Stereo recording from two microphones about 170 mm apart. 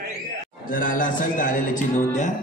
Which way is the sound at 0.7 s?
55° left (ahead or behind).